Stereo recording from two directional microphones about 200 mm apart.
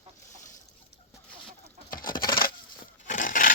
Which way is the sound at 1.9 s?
45° left (ahead or behind).